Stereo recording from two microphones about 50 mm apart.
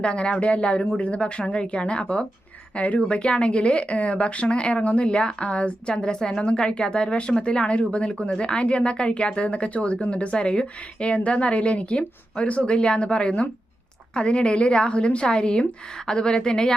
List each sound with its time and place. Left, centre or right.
0.0 s a woman's voice: left